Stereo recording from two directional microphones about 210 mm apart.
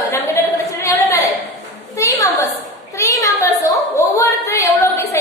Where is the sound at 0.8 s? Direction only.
15° left (ahead or behind).